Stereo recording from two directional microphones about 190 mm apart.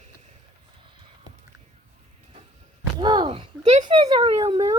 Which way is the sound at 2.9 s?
25° right (ahead or behind).